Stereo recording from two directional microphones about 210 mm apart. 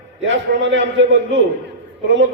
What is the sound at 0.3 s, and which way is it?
Speech, 60° right (ahead or behind).